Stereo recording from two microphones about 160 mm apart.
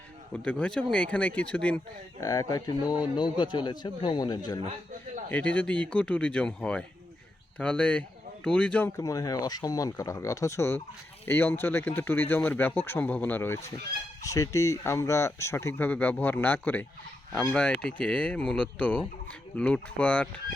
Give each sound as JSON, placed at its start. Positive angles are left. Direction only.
{"t": 0.3, "sound": "speech", "side_deg": 5}
{"t": 2.2, "sound": "a man's voice", "side_deg": 20}
{"t": 5.3, "sound": "speech", "side_deg": 10}
{"t": 9.0, "sound": "a man's voice", "side_deg": 20}